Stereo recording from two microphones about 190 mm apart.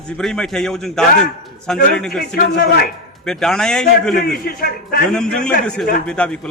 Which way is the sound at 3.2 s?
5° left (ahead or behind).